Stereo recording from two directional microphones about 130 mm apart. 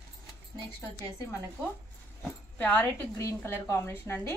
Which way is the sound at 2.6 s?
15° left (ahead or behind).